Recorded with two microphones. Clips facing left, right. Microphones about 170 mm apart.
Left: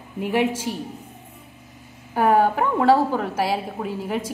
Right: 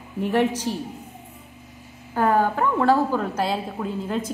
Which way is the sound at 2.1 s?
15° left (ahead or behind).